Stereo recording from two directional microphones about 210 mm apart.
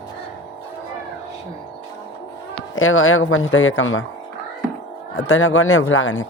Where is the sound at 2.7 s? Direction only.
70° left (ahead or behind).